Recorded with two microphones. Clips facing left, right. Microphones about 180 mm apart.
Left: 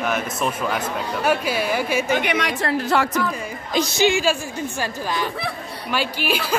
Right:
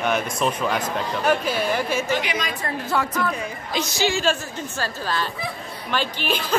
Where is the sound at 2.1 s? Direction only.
60° left (ahead or behind); by 3.0 s 75° left (ahead or behind).